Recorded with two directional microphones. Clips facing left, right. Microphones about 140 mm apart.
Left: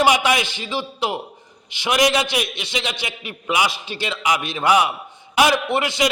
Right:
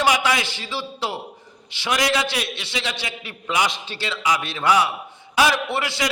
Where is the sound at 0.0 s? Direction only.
20° left (ahead or behind).